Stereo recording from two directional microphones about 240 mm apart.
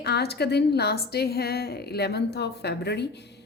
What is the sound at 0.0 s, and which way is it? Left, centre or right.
A woman's voice, left.